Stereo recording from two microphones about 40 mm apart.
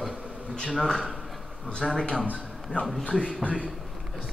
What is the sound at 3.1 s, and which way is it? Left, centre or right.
Speech, centre.